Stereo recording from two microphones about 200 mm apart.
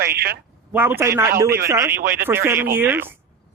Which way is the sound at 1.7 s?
15° right (ahead or behind).